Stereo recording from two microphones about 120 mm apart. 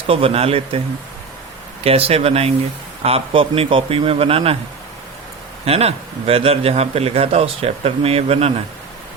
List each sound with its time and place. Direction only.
0.1 s a man's voice: 55° right (ahead or behind)
1.8 s a man's voice: 55° right (ahead or behind)
5.6 s a man's voice: 55° right (ahead or behind)